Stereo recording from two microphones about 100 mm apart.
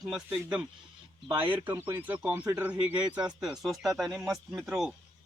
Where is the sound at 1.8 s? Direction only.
20° right (ahead or behind).